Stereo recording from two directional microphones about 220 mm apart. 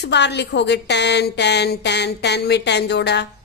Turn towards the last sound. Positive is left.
turn(degrees=50)  # may be behind; listen again after turning